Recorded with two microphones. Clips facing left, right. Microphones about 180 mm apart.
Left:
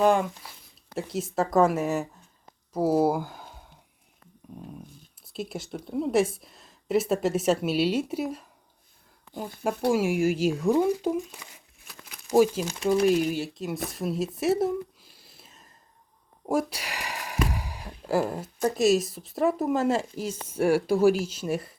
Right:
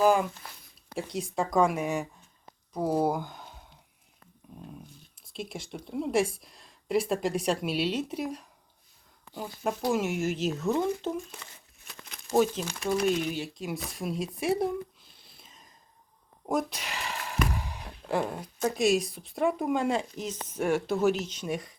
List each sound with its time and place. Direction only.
0.0 s speech: centre (ahead or behind)
5.2 s speech: 5° left (ahead or behind)
9.4 s speech: 55° left (ahead or behind)
9.9 s speech: 10° left (ahead or behind)
12.7 s speech: 20° left (ahead or behind)
13.3 s speech: centre (ahead or behind)
17.5 s a sound: 10° left (ahead or behind)
18.6 s speech: centre (ahead or behind)